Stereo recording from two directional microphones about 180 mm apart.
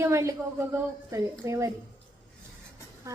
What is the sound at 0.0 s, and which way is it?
Speech, 15° right (ahead or behind).